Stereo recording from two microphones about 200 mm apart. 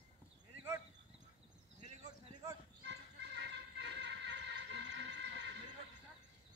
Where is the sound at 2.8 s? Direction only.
60° right (ahead or behind).